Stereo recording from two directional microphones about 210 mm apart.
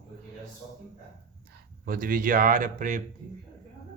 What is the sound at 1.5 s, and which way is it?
Speech, 45° right (ahead or behind).